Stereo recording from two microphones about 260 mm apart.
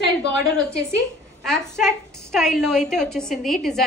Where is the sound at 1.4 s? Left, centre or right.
Centre.